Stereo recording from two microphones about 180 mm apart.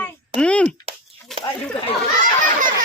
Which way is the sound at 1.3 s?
Centre (ahead or behind).